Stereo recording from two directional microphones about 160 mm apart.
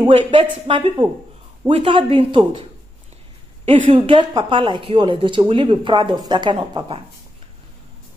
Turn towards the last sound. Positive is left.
turn(degrees=-35)  # may be behind; listen again after turning